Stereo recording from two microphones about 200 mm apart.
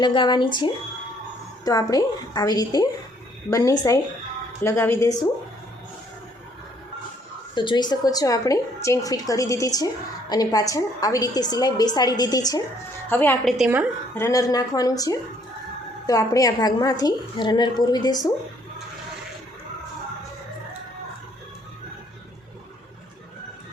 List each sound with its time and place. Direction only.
0.0 s a woman's voice: 25° left (ahead or behind)
7.5 s a woman's voice: 25° left (ahead or behind)
13.6 s a woman's voice: 5° right (ahead or behind)
14.2 s a woman's voice: 15° left (ahead or behind)